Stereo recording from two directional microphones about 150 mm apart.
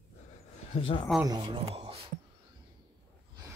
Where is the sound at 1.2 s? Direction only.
30° right (ahead or behind).